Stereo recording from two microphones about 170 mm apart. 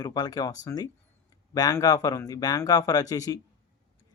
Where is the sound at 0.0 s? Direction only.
25° left (ahead or behind).